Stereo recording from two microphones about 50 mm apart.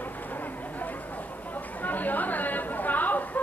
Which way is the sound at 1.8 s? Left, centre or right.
Left.